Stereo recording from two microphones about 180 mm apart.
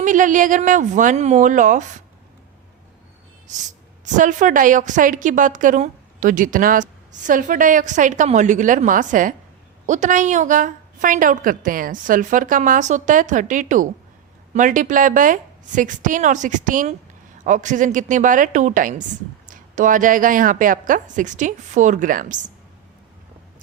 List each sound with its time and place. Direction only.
0.0 s a woman's voice: 45° right (ahead or behind)
3.5 s gasp: 40° right (ahead or behind)
4.0 s a woman's voice: 45° right (ahead or behind)